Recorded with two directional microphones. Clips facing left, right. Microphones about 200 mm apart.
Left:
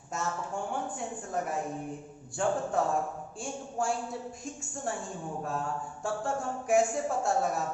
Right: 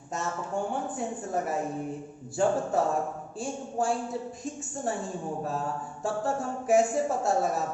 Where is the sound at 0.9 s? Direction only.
5° right (ahead or behind).